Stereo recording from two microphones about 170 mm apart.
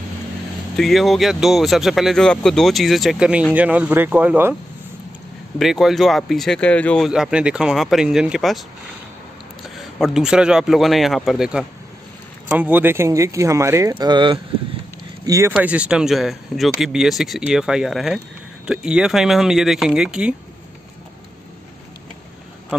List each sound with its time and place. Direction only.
0.7 s speech: centre (ahead or behind)
5.6 s speech: centre (ahead or behind)
7.1 s speech: 5° right (ahead or behind)
9.8 s speech: centre (ahead or behind); by 15.5 s 20° right (ahead or behind)
15.5 s speech: 5° right (ahead or behind)
22.7 s a sound: 5° right (ahead or behind)